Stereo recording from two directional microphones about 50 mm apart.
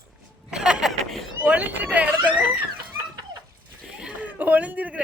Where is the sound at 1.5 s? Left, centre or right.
Right.